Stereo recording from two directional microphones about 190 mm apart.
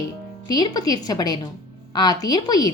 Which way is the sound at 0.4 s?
20° left (ahead or behind).